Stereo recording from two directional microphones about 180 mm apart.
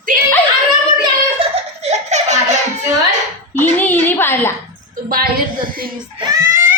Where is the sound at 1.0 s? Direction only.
30° right (ahead or behind).